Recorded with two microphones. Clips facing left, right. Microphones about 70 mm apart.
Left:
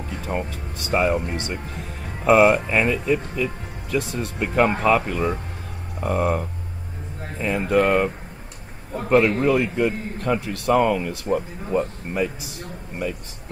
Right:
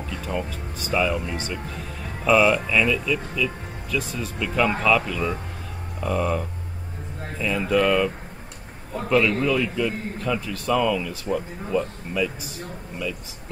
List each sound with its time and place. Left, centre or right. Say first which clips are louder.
0.3 s speech: left 2 dB; left
4.1 s speech: left 2 dB; left
4.5 s speech: left 2 dB; left
9.1 s a man's voice: left 3 dB; left
10.7 s a man's voice: left 3 dB; left